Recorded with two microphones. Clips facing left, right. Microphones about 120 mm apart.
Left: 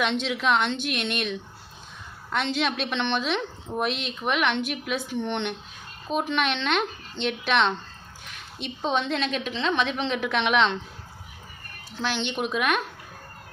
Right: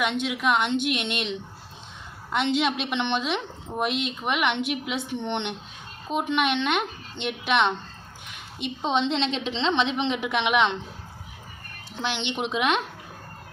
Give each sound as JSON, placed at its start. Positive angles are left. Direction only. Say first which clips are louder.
{"t": 0.0, "sound": "a woman's voice", "louder": "even", "side_deg": -10}
{"t": 11.9, "sound": "a woman's voice", "louder": "left 1 dB", "side_deg": -20}